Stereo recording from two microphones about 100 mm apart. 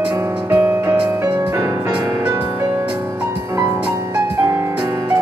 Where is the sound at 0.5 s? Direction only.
20° right (ahead or behind).